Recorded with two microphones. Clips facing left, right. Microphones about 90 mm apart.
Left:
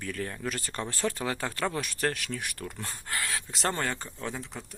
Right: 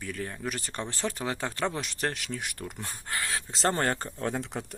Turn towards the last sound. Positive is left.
turn(degrees=-65)  # may be behind; listen again after turning